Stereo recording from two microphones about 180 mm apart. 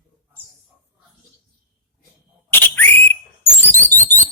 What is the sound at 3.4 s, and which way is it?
Chirp, 35° left (ahead or behind).